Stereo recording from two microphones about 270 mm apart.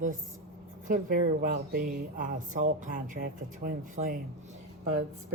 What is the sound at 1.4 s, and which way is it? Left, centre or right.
Speech, right.